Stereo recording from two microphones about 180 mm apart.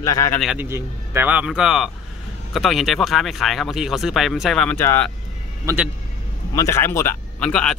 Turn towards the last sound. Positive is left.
turn(degrees=5)  # may be behind; listen again after turning